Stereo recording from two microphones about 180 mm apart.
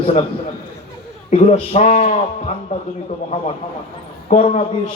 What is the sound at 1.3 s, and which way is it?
Speech, 40° left (ahead or behind).